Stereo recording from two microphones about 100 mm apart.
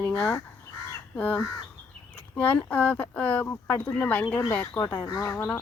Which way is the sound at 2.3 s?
15° left (ahead or behind).